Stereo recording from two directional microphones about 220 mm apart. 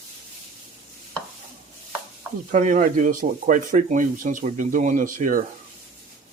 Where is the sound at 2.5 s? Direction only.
35° right (ahead or behind).